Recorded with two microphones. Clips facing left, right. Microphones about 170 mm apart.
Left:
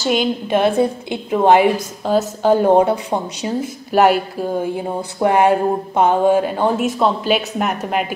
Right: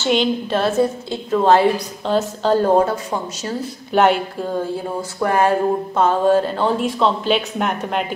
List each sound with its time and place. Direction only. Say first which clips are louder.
0.1 s a woman's voice: even; 10° left (ahead or behind)
3.4 s a woman's voice: left 3 dB; 5° left (ahead or behind)
4.5 s a woman's voice: left 1 dB; 15° left (ahead or behind)